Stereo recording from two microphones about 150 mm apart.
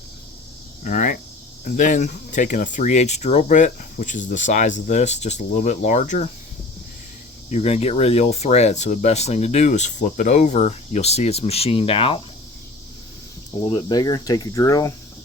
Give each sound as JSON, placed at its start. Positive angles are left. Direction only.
{"t": 0.9, "sound": "speech", "side_deg": 60}
{"t": 7.5, "sound": "speech", "side_deg": 45}
{"t": 13.6, "sound": "speech", "side_deg": 30}